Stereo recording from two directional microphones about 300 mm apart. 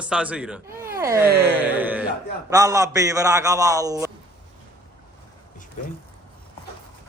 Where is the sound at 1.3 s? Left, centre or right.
Right.